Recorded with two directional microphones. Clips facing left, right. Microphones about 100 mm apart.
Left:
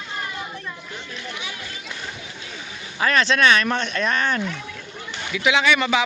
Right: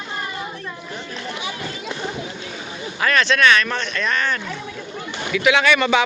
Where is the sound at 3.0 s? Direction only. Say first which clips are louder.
Right 1 dB; 35° left (ahead or behind).